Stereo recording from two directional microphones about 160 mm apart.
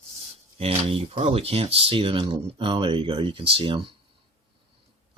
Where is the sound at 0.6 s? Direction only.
35° right (ahead or behind).